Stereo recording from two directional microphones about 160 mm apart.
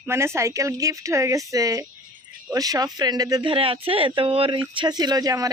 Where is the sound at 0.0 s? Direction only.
15° right (ahead or behind).